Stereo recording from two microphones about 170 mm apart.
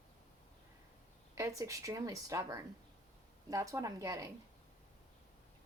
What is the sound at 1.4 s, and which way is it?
Speech, 20° right (ahead or behind).